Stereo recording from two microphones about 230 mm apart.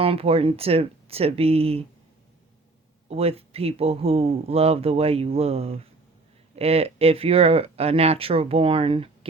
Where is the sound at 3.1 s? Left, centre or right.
Right.